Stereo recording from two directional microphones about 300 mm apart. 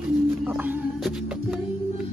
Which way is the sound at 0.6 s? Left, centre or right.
Centre.